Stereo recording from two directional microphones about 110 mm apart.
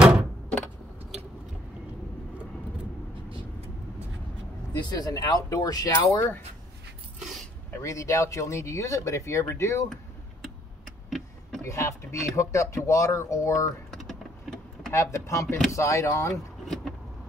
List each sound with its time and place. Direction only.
0.0 s door: 10° right (ahead or behind)
4.7 s speech: 40° left (ahead or behind)
7.8 s speech: 30° left (ahead or behind)
11.1 s vehicle: centre (ahead or behind)
11.6 s speech: 25° left (ahead or behind)
14.9 s a sound: 25° left (ahead or behind)
15.4 s speech: 5° left (ahead or behind)
15.7 s speech: 25° left (ahead or behind)
16.6 s vehicle: 5° left (ahead or behind)